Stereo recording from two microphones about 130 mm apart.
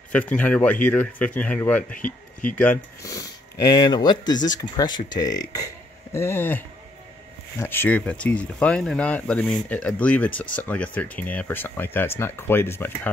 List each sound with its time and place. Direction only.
0.1 s speech: 10° left (ahead or behind)
1.9 s speech: 90° left
2.5 s speech: 15° left (ahead or behind)
3.0 s speech: 25° left (ahead or behind)
6.1 s speech: 15° left (ahead or behind)